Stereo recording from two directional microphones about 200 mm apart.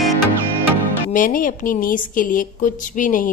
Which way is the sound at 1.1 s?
45° left (ahead or behind).